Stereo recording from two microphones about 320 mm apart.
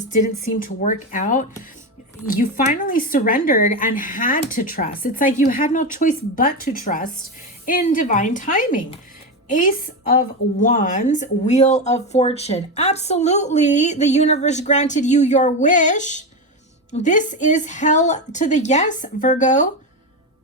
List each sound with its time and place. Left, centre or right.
0.6 s a woman's voice: left